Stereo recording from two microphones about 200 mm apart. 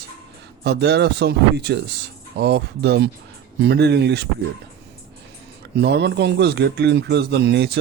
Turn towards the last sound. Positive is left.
turn(degrees=-55)  # may be behind; listen again after turning